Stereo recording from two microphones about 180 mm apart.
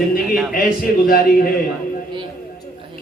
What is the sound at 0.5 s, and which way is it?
Speech, 55° left (ahead or behind).